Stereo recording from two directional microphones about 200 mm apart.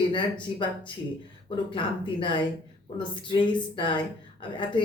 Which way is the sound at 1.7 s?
25° left (ahead or behind).